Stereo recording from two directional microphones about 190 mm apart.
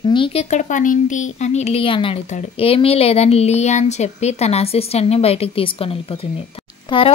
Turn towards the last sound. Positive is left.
turn(degrees=30)  # may be behind; listen again after turning